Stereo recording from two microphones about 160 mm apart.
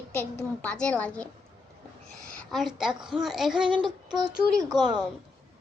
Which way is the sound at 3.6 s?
30° right (ahead or behind).